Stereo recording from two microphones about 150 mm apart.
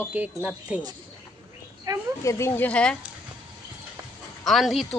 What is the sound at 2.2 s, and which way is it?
Speech, 20° left (ahead or behind).